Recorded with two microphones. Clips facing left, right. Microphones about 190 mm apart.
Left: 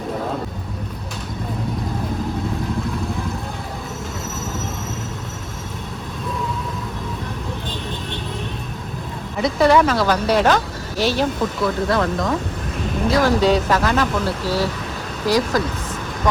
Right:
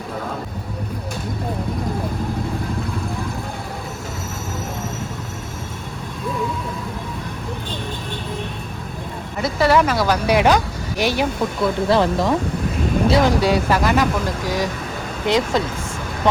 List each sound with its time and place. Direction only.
9.4 s speech: 5° right (ahead or behind)
11.6 s speech: 30° right (ahead or behind)
13.4 s speech: 10° right (ahead or behind)
16.2 s vehicle: 25° right (ahead or behind)